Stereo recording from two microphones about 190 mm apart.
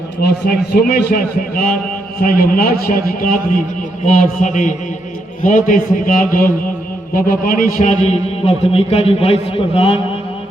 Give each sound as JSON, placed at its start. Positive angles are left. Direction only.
{"t": 0.2, "sound": "a man's voice", "side_deg": 60}